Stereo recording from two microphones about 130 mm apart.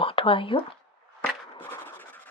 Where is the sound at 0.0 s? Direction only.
45° left (ahead or behind).